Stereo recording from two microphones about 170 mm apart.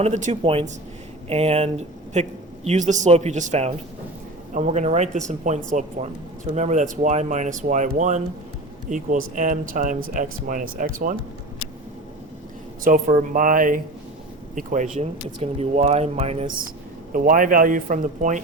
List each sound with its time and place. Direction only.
0.0 s speech: 45° right (ahead or behind)
12.8 s speech: 50° right (ahead or behind)
17.1 s speech: 50° right (ahead or behind)